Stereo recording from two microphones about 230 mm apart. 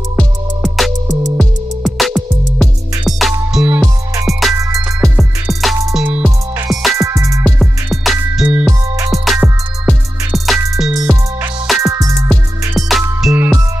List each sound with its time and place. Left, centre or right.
0.1 s music: centre
7.0 s music: centre
7.4 s music: centre
11.8 s music: centre
12.3 s music: centre